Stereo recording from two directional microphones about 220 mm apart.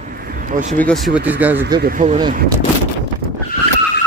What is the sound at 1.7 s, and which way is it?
Speech, 45° right (ahead or behind).